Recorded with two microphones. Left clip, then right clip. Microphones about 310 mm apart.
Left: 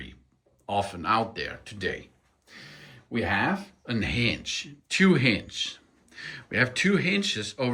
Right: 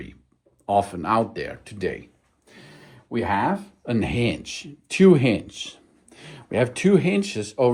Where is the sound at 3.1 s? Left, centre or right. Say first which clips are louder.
Right 3 dB; centre.